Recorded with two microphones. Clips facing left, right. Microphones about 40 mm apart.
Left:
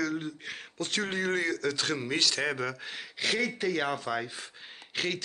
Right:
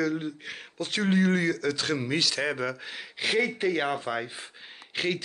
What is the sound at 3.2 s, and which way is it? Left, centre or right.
Speech, centre.